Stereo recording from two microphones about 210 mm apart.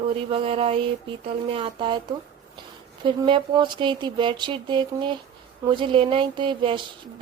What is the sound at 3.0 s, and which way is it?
Speech, 25° right (ahead or behind).